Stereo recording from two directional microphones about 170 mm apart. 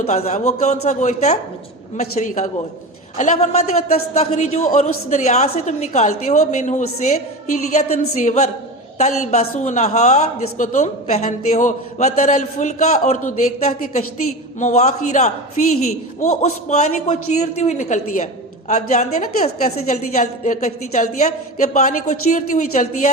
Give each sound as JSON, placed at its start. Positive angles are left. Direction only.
{"t": 0.0, "sound": "a woman's voice", "side_deg": 40}